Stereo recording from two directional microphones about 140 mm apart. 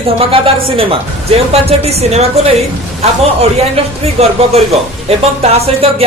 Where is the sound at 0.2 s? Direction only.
40° right (ahead or behind).